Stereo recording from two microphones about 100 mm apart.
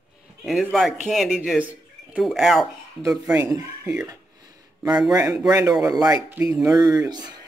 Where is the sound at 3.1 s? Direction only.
10° right (ahead or behind).